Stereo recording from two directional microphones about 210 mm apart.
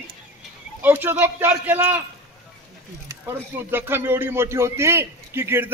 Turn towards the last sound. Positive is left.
turn(degrees=-10)  # may be behind; listen again after turning